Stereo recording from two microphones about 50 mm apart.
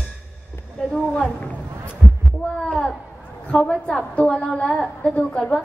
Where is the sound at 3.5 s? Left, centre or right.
Left; by 5.1 s centre.